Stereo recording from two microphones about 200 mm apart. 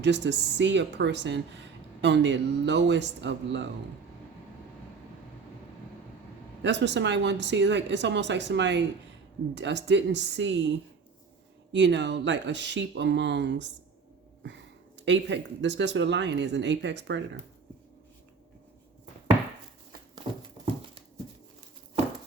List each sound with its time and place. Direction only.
0.0 s speech: 60° right (ahead or behind)
6.6 s speech: 60° right (ahead or behind)